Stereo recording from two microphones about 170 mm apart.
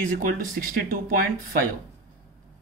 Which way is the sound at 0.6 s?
55° right (ahead or behind).